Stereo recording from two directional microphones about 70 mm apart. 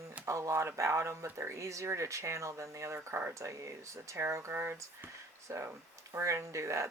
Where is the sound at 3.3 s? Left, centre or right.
Right.